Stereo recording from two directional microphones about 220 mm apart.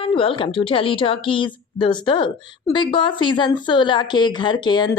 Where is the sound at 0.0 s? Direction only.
25° left (ahead or behind).